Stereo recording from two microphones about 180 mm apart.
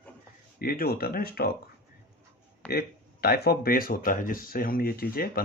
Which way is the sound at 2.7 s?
60° left (ahead or behind).